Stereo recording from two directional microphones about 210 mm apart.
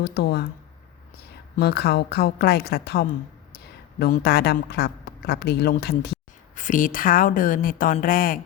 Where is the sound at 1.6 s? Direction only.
50° left (ahead or behind).